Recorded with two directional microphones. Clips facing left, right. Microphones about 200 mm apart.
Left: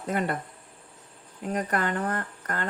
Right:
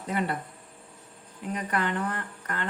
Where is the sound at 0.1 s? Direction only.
45° left (ahead or behind).